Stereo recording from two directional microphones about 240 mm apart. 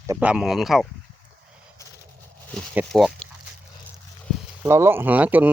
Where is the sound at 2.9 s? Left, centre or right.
Centre.